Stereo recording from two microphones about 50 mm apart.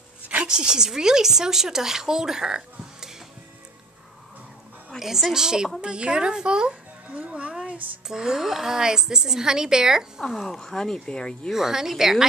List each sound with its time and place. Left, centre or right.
0.5 s speech: centre
4.9 s a woman's voice: centre; by 7.8 s right
8.1 s speech: centre
10.3 s speech: centre
11.5 s speech: centre